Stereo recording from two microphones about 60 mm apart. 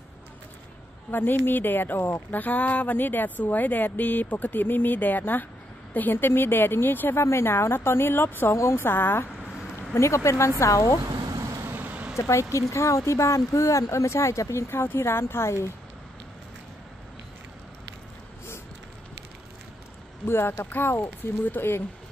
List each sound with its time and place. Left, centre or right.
1.4 s speech: left
9.9 s speech: left
11.6 s vehicle: right
12.2 s speech: left
20.2 s speech: left